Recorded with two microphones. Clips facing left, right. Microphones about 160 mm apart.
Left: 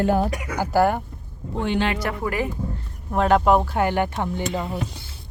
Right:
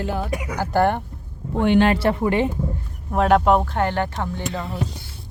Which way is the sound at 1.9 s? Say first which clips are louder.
Right 6 dB; 30° right (ahead or behind).